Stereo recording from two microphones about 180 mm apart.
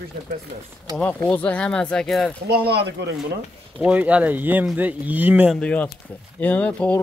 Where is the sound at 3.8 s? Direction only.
5° right (ahead or behind).